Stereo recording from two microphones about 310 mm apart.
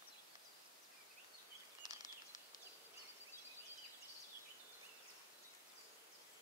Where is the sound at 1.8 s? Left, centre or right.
Left.